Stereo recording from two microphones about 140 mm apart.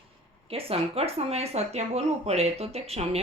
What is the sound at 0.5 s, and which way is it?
Speech, 45° right (ahead or behind).